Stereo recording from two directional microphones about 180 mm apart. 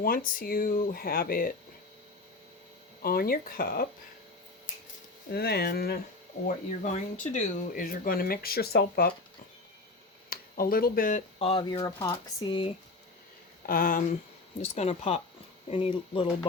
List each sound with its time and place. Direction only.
0.0 s speech: 55° left (ahead or behind)
3.0 s speech: 55° left (ahead or behind)
5.3 s speech: 60° left (ahead or behind)
6.8 s speech: 40° left (ahead or behind); by 9.1 s 60° left (ahead or behind)
10.2 s speech: 55° left (ahead or behind)
11.3 s speech: 30° left (ahead or behind)
13.7 s speech: 50° left (ahead or behind)
14.6 s speech: 35° left (ahead or behind)